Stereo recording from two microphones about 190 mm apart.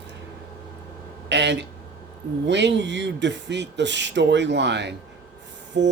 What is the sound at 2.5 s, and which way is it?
Speech, 65° right (ahead or behind).